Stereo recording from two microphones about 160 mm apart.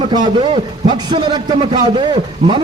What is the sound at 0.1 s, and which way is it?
A man's voice, 30° right (ahead or behind).